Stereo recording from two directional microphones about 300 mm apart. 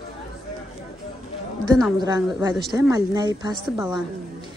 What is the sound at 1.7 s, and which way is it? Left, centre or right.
A woman's voice, centre.